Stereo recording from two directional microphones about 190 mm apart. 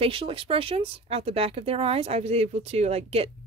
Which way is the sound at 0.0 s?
30° right (ahead or behind).